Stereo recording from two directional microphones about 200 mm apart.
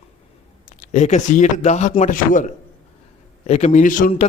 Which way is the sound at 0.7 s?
40° left (ahead or behind).